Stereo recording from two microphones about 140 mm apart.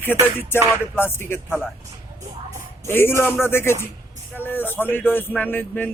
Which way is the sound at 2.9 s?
15° left (ahead or behind).